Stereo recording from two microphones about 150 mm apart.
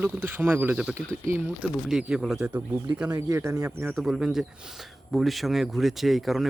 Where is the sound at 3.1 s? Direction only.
20° right (ahead or behind).